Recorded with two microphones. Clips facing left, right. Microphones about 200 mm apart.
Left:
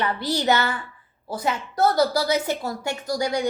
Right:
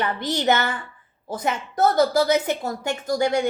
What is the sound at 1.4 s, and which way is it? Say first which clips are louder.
A woman's voice: right 1 dB; 20° right (ahead or behind).